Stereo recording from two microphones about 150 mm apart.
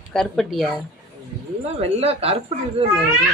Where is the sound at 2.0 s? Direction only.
40° right (ahead or behind).